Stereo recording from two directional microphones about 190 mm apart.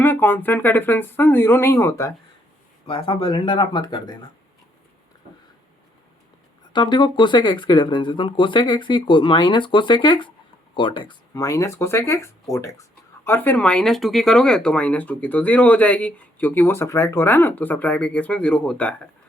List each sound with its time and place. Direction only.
0.0 s speech: 10° left (ahead or behind)
2.8 s speech: 25° left (ahead or behind)
6.7 s speech: 25° left (ahead or behind); by 19.0 s 5° left (ahead or behind)